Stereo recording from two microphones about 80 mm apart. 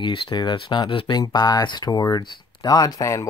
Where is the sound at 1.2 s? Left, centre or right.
Left.